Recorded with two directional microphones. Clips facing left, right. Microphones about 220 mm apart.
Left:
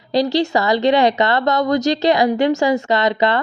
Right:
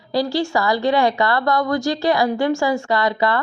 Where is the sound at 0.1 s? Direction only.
20° left (ahead or behind).